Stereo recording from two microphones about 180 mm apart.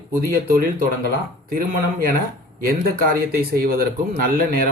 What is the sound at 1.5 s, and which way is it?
A man's voice, 50° right (ahead or behind).